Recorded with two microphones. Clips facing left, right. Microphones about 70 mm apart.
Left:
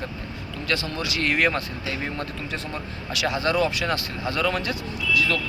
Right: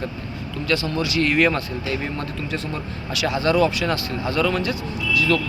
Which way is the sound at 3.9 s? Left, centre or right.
Right.